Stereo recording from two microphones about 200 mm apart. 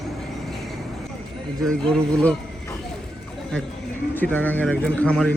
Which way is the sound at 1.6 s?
5° left (ahead or behind).